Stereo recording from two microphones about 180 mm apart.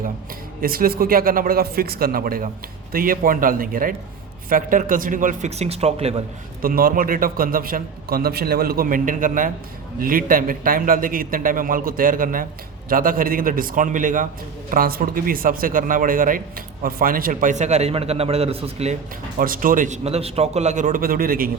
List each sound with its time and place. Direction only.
0.6 s speech: 55° right (ahead or behind); by 6.2 s 35° right (ahead or behind)
6.6 s speech: 55° right (ahead or behind); by 18.9 s 35° right (ahead or behind)
19.4 s speech: 50° right (ahead or behind)